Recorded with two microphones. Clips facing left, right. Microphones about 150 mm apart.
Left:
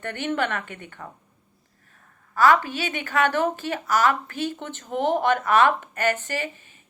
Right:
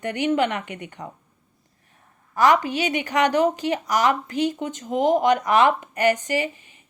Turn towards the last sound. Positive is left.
turn(degrees=-15)  # may be behind; listen again after turning